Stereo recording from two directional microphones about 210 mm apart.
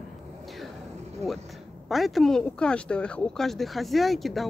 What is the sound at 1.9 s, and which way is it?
Speech, centre (ahead or behind).